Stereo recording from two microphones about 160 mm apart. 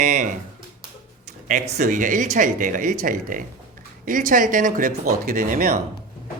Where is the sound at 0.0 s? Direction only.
50° right (ahead or behind).